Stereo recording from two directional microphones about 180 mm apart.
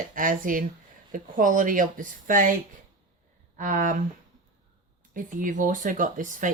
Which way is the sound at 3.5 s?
50° right (ahead or behind).